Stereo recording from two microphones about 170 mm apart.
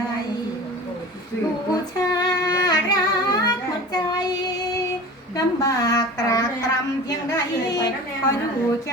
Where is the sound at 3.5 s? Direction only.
25° left (ahead or behind).